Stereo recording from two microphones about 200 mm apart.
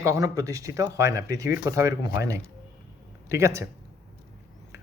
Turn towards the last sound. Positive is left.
turn(degrees=-15)  # may be behind; listen again after turning